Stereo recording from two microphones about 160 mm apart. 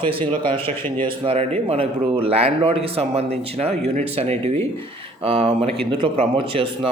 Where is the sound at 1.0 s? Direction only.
35° right (ahead or behind).